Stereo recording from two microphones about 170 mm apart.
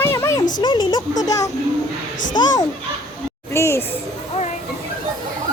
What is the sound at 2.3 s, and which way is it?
Speech, 25° left (ahead or behind).